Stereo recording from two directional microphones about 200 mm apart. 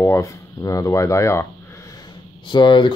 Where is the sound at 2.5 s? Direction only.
25° left (ahead or behind).